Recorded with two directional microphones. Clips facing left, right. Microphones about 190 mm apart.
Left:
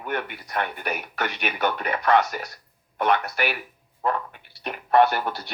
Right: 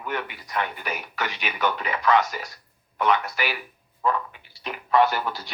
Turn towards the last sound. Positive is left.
turn(degrees=55)  # may be behind; listen again after turning